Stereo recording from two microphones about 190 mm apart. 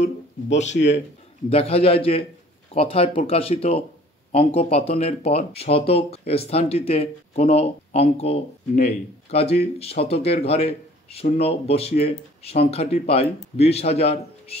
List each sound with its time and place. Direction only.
1.5 s speech: 30° left (ahead or behind)